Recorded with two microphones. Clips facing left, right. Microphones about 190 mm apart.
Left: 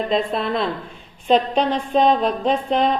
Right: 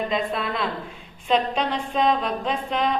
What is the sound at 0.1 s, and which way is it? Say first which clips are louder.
A woman's voice: left 5 dB; 35° left (ahead or behind).